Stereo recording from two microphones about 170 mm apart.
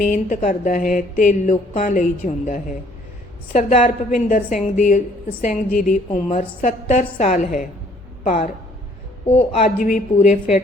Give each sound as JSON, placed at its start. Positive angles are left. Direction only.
{"t": 0.0, "sound": "speech", "side_deg": 45}